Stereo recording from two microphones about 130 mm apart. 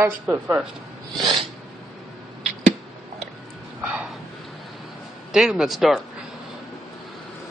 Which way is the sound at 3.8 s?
10° right (ahead or behind).